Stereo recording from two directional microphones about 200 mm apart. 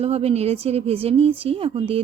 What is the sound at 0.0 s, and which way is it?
Speech, 30° right (ahead or behind).